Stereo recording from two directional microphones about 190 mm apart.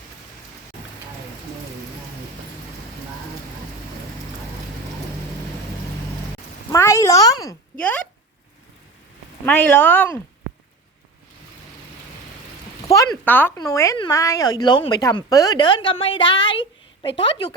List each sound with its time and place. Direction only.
6.7 s a woman's voice: 15° left (ahead or behind)
7.8 s speech: 5° left (ahead or behind)
9.5 s speech: 5° left (ahead or behind)
12.9 s a woman's voice: 15° left (ahead or behind)